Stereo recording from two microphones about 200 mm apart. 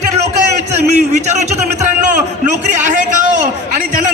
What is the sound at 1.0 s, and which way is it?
A man's voice, 35° right (ahead or behind).